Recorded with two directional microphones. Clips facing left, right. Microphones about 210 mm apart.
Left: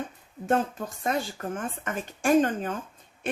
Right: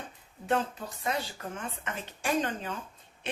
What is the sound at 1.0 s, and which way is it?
A woman's voice, 50° left (ahead or behind).